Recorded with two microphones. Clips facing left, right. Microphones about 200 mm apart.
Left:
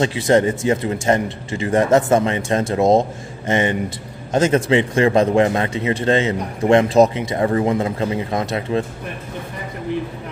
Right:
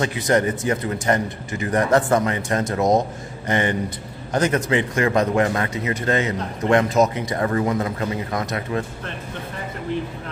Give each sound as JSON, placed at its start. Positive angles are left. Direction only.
{"t": 0.0, "sound": "speech", "side_deg": 25}